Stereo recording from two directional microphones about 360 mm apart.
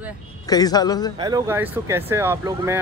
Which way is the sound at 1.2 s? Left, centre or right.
Centre.